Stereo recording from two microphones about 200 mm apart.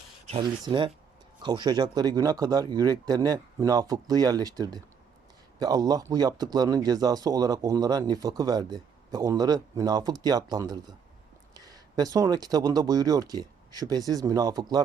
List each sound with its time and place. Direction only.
0.3 s speech: 25° right (ahead or behind)